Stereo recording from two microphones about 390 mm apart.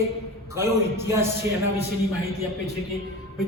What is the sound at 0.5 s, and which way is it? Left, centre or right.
Speech, centre.